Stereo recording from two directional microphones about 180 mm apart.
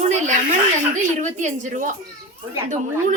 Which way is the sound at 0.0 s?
40° right (ahead or behind).